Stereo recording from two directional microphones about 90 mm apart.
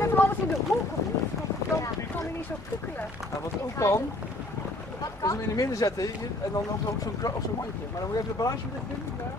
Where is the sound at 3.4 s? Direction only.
35° left (ahead or behind).